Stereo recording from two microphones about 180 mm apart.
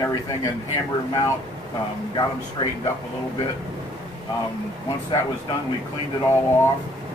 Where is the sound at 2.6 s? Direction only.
25° left (ahead or behind).